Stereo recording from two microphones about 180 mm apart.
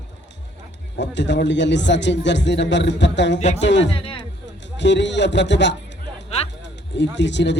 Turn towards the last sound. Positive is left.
turn(degrees=75)  # may be behind; listen again after turning